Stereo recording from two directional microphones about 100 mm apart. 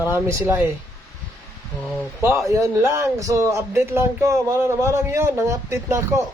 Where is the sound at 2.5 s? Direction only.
30° right (ahead or behind).